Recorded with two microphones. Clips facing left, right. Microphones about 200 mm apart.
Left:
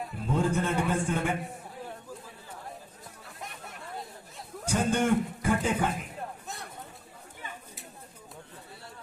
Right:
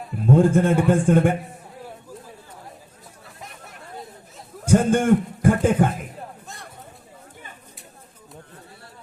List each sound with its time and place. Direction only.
0.3 s a man's voice: 50° right (ahead or behind)
4.6 s a man's voice: 50° right (ahead or behind)